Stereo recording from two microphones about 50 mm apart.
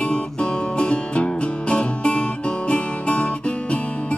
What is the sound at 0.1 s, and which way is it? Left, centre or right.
Music, centre.